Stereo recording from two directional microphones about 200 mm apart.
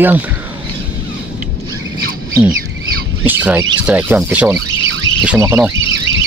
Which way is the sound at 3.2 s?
10° right (ahead or behind).